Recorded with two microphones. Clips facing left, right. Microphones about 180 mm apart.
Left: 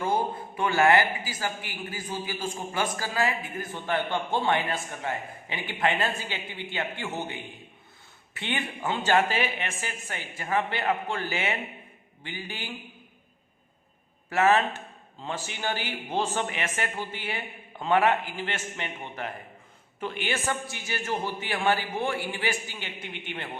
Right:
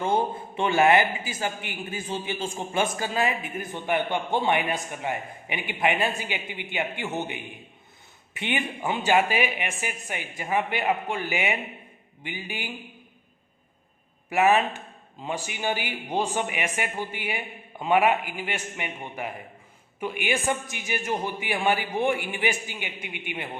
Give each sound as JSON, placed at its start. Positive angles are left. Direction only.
{"t": 0.0, "sound": "a man's voice", "side_deg": -25}
{"t": 14.3, "sound": "a man's voice", "side_deg": -15}